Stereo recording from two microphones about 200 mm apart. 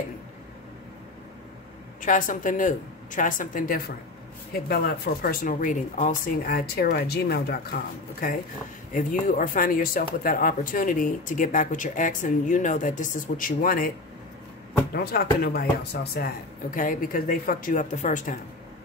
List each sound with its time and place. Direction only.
2.0 s speech: 40° left (ahead or behind)